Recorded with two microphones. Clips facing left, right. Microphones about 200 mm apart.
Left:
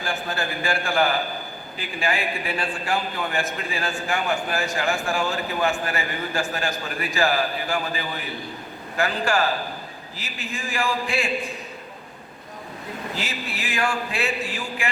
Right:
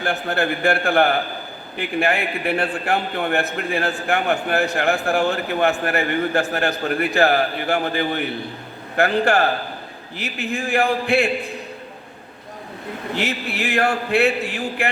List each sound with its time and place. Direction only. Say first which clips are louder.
0.0 s a man's voice: right 6 dB; 60° right (ahead or behind)
13.1 s a man's voice: right 7 dB; 60° right (ahead or behind)